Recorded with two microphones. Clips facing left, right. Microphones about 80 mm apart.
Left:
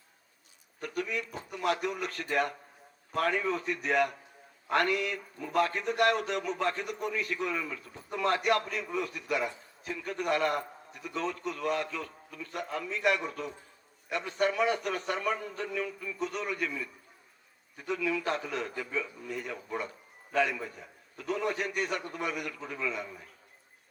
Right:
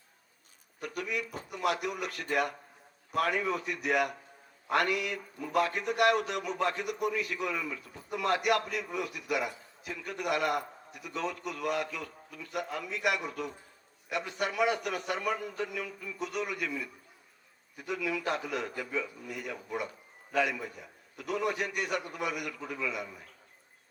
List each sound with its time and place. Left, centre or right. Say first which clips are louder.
0.8 s a man's voice: left 1 dB; left
17.7 s a man's voice: left 2 dB; left